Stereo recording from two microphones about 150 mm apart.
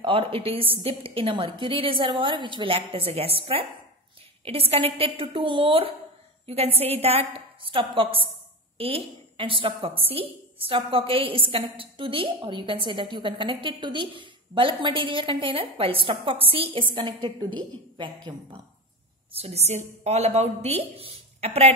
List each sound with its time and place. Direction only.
0.0 s a woman's voice: 40° right (ahead or behind)